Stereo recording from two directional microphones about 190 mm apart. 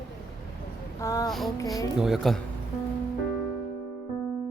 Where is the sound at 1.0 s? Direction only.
20° left (ahead or behind).